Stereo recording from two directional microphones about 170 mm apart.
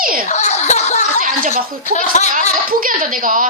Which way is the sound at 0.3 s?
40° left (ahead or behind).